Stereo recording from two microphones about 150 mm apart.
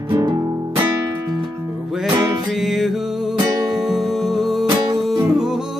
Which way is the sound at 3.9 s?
Centre (ahead or behind).